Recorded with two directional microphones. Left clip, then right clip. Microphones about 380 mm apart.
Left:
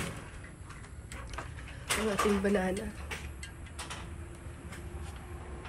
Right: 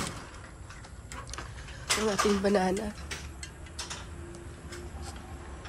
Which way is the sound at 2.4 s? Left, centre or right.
Centre.